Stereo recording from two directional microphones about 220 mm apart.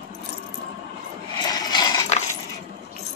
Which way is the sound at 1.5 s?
20° left (ahead or behind).